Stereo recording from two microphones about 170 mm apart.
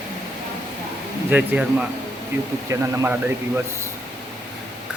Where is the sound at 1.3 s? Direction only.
10° right (ahead or behind).